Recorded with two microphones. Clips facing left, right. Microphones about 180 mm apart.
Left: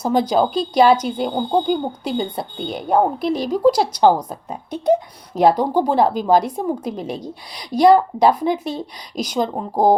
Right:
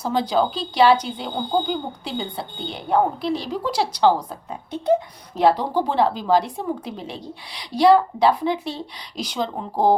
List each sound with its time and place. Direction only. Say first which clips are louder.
0.0 s speech: left 4 dB; 45° left (ahead or behind)